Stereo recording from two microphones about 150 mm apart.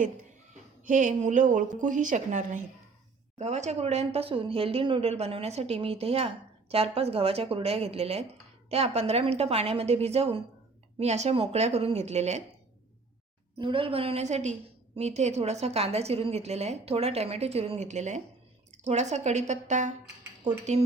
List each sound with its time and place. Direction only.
0.9 s a woman's voice: 60° right (ahead or behind)
13.6 s a woman's voice: 35° right (ahead or behind)